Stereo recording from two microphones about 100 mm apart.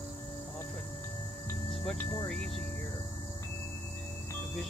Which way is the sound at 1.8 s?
5° left (ahead or behind).